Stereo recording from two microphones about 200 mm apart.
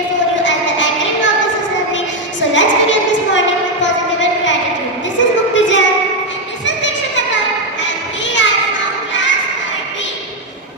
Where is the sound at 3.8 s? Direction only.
65° left (ahead or behind).